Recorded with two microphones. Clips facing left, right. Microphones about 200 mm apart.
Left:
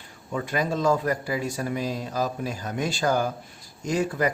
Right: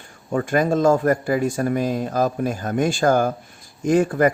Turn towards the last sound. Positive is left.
turn(degrees=-50)  # may be behind; listen again after turning